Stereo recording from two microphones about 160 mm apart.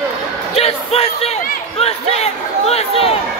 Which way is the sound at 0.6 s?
40° left (ahead or behind).